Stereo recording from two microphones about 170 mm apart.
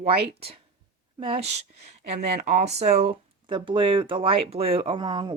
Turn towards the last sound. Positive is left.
turn(degrees=-25)  # may be behind; listen again after turning